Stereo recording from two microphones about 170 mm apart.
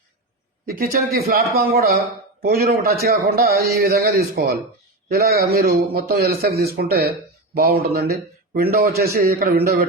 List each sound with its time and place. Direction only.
0.6 s a man's voice: 65° right (ahead or behind)